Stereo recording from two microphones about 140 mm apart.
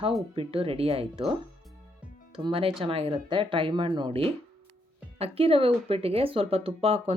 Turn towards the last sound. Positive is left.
turn(degrees=-45)  # may be behind; listen again after turning